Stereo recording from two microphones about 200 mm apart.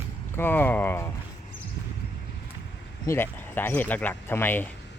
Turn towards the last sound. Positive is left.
turn(degrees=10)  # may be behind; listen again after turning